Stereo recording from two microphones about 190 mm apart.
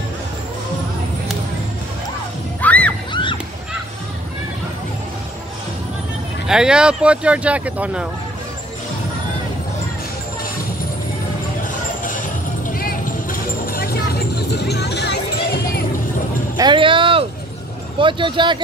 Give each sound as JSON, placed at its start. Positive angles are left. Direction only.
{"t": 2.6, "sound": "music", "side_deg": 5}
{"t": 3.1, "sound": "a sound", "side_deg": 25}
{"t": 6.4, "sound": "speech", "side_deg": -5}
{"t": 12.6, "sound": "vehicle", "side_deg": 45}
{"t": 16.5, "sound": "music", "side_deg": -25}
{"t": 17.9, "sound": "speech", "side_deg": -25}